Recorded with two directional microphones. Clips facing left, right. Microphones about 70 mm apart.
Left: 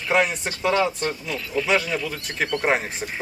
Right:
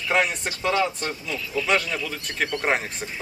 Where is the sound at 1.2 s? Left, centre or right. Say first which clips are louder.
Left 2 dB; left.